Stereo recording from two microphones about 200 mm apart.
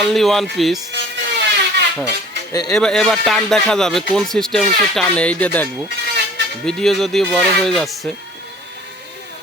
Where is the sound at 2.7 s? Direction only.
Centre (ahead or behind).